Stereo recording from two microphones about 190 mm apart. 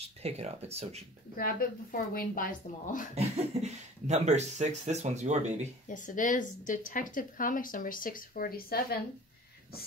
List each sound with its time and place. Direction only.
0.0 s speech: 35° right (ahead or behind)
1.3 s a woman's voice: 50° left (ahead or behind)
3.2 s speech: 35° right (ahead or behind)
5.9 s a woman's voice: 45° left (ahead or behind)